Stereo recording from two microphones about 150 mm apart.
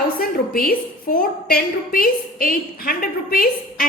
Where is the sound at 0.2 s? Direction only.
75° left (ahead or behind).